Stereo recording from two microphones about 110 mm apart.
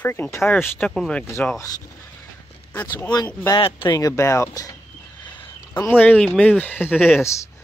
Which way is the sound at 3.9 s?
30° left (ahead or behind).